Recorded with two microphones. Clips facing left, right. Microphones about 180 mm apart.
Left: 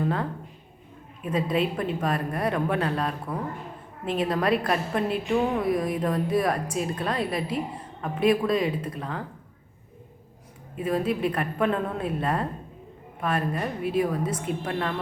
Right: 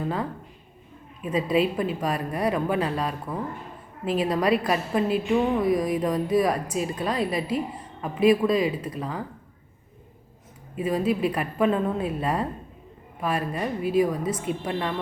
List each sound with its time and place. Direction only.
0.0 s a woman's voice: 5° right (ahead or behind)
10.8 s a woman's voice: 5° right (ahead or behind)